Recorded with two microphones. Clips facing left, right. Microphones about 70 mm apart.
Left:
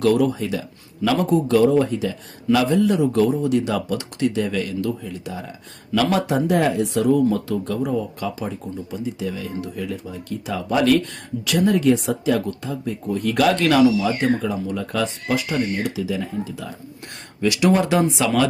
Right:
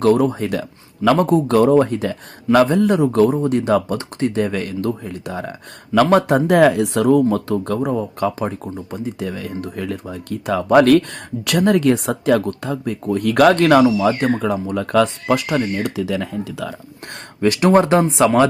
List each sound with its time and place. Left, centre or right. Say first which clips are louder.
0.0 s speech: right 3 dB; right
6.6 s speech: right 6 dB; right
17.4 s speech: right 4 dB; right